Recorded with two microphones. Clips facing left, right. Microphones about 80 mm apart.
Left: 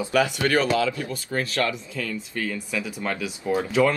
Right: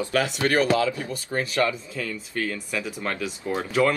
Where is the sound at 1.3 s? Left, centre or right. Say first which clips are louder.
Right 2 dB; centre.